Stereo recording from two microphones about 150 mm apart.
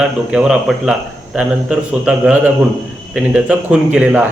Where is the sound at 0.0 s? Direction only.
5° right (ahead or behind).